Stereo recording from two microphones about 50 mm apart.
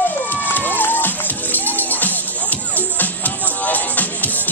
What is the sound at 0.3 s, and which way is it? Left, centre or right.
Music, left.